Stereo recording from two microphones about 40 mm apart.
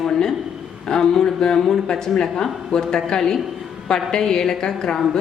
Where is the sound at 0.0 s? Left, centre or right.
Centre.